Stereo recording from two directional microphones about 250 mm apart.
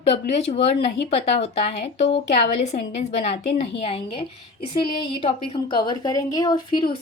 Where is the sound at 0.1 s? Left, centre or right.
Left.